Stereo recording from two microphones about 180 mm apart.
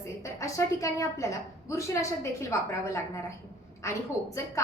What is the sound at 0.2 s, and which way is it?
A woman's voice, 15° left (ahead or behind).